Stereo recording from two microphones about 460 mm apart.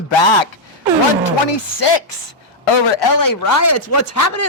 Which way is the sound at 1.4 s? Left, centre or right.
Left.